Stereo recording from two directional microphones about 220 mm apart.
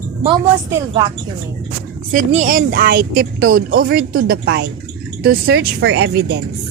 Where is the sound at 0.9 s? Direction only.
20° right (ahead or behind).